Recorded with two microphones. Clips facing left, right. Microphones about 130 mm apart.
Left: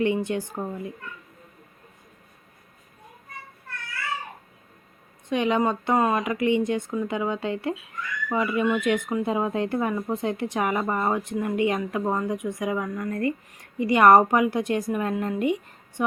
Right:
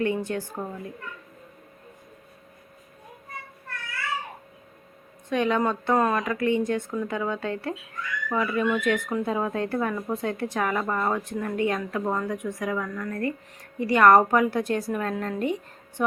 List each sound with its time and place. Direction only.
0.0 s speech: 20° left (ahead or behind)
5.3 s speech: 15° left (ahead or behind)